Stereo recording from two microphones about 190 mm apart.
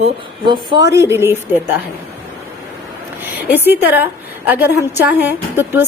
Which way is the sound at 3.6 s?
10° right (ahead or behind).